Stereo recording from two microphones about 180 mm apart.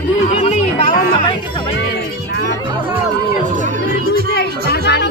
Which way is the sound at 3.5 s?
45° right (ahead or behind).